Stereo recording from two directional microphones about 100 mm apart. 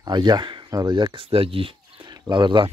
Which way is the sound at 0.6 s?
40° right (ahead or behind).